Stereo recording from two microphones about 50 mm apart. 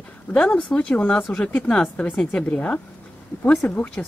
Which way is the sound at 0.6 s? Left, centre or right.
Left.